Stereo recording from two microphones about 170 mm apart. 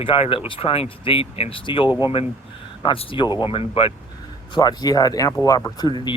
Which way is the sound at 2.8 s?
30° left (ahead or behind).